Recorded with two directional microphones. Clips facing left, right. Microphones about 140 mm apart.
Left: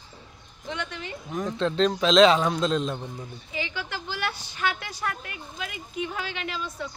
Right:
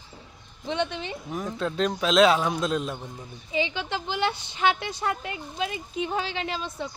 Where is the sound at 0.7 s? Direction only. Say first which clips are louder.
Right 6 dB; 25° right (ahead or behind).